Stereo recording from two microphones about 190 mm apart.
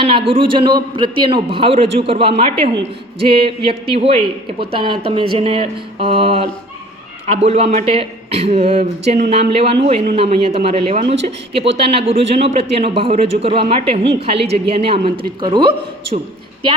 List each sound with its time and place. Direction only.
0.0 s a man's voice: 30° right (ahead or behind)